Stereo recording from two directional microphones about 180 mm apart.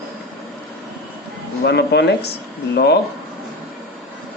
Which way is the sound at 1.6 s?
65° left (ahead or behind).